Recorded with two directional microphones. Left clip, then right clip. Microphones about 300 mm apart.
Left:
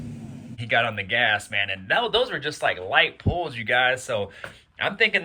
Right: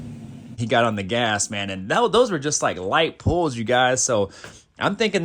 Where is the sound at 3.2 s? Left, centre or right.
Left.